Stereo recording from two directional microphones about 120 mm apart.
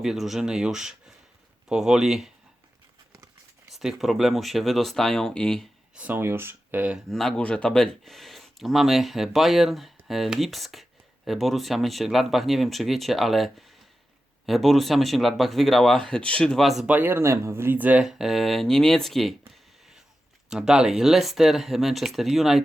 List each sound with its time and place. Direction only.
0.0 s speech: centre (ahead or behind)
3.7 s speech: centre (ahead or behind)
5.9 s speech: 10° right (ahead or behind)
7.1 s speech: 5° left (ahead or behind)
16.9 s speech: 15° right (ahead or behind); by 19.4 s centre (ahead or behind)
20.5 s speech: 5° right (ahead or behind)